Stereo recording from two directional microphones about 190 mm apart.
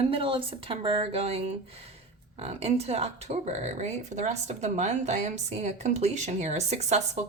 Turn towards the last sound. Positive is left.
turn(degrees=-35)  # may be behind; listen again after turning